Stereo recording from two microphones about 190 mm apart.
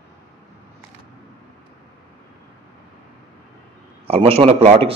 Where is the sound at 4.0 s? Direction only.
30° right (ahead or behind).